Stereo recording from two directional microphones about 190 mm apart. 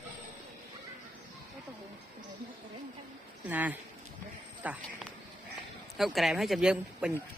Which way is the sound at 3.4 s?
10° right (ahead or behind).